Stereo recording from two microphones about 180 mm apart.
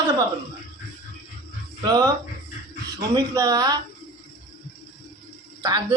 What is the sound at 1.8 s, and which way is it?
Speech, 20° right (ahead or behind).